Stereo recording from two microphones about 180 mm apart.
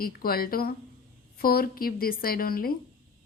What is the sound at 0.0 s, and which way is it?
A woman's voice, 55° left (ahead or behind).